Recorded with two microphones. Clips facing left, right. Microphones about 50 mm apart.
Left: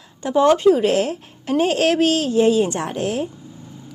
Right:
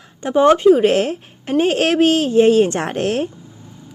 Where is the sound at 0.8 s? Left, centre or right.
Right.